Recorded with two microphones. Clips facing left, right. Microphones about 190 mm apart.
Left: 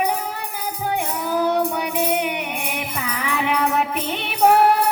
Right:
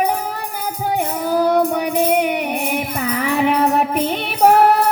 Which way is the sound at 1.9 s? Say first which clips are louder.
Right 7 dB; 40° right (ahead or behind).